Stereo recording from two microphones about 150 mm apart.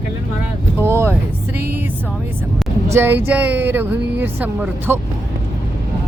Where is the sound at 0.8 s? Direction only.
15° right (ahead or behind).